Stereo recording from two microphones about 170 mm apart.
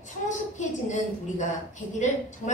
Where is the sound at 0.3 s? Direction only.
45° left (ahead or behind).